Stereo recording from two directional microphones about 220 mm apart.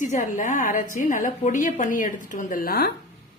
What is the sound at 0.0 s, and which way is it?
A woman's voice, 35° left (ahead or behind).